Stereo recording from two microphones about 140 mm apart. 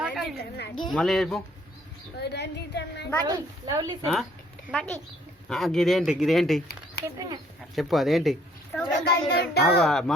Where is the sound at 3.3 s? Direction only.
25° right (ahead or behind).